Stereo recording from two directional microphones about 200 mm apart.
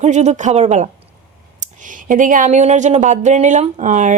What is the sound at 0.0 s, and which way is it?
Speech, 35° right (ahead or behind).